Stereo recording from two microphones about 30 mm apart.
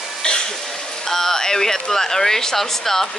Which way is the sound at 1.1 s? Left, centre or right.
Centre.